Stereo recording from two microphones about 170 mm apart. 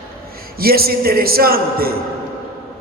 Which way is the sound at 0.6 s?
65° right (ahead or behind).